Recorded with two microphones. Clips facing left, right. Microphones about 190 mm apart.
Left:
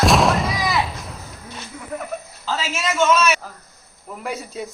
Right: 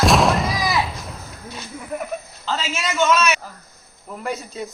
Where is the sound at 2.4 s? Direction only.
5° left (ahead or behind).